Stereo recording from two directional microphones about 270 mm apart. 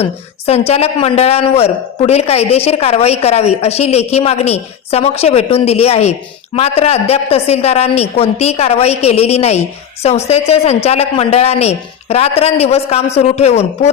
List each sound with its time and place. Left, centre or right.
0.0 s speech: left